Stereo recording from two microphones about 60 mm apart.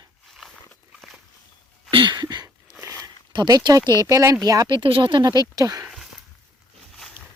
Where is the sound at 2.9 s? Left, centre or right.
Right.